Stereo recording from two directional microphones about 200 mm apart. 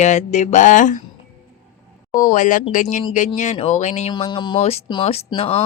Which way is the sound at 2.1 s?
40° left (ahead or behind).